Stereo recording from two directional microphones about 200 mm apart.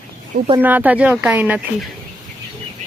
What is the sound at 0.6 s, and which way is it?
Speech, 10° right (ahead or behind).